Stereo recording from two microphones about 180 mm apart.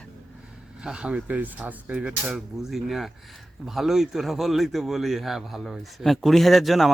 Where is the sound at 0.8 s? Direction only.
5° right (ahead or behind).